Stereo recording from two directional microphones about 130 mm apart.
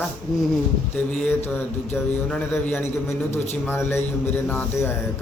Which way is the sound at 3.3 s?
60° left (ahead or behind).